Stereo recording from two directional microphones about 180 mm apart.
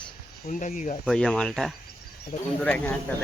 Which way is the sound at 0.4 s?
40° left (ahead or behind).